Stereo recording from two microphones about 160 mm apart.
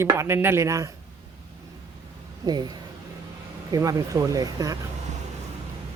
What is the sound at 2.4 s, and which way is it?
Speech, 25° right (ahead or behind).